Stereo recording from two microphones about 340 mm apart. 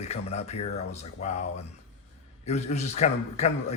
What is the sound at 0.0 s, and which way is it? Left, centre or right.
A man's voice, centre.